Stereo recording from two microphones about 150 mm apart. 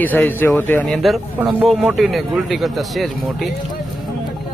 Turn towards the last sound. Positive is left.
turn(degrees=0)  # may be behind; listen again after turning